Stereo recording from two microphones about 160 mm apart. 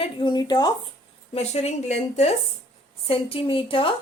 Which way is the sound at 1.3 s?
40° left (ahead or behind).